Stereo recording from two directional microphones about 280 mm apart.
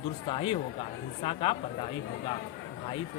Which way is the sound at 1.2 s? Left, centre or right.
Centre.